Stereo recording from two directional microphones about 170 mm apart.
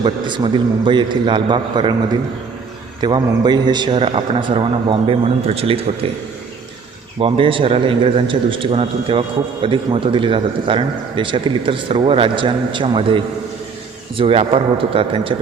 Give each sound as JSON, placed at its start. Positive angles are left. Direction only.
{"t": 0.0, "sound": "a man's voice", "side_deg": -25}
{"t": 7.2, "sound": "speech", "side_deg": -30}